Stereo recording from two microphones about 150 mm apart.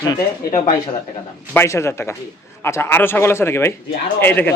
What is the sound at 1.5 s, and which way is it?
A man's voice, 15° left (ahead or behind).